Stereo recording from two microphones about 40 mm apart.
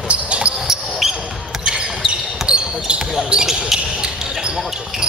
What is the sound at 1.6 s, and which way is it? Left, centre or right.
Basketball bounce, right.